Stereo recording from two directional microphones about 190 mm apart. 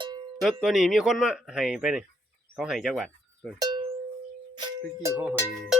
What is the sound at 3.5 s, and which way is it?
Cowbell, 20° right (ahead or behind).